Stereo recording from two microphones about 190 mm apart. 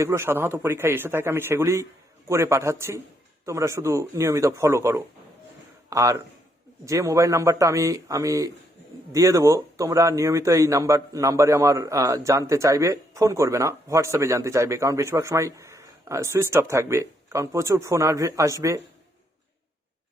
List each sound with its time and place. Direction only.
0.0 s speech: 15° right (ahead or behind)